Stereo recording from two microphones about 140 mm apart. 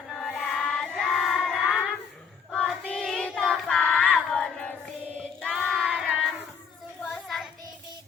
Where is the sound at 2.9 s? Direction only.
5° left (ahead or behind).